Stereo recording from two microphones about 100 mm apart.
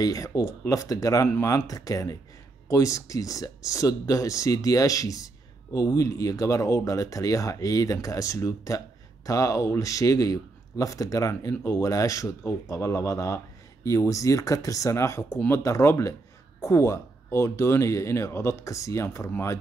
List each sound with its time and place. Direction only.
0.0 s speech: 35° left (ahead or behind)